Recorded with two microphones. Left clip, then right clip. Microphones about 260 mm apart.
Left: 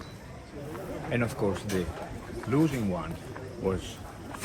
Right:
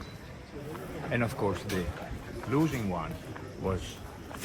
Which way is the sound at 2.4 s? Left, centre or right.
Centre.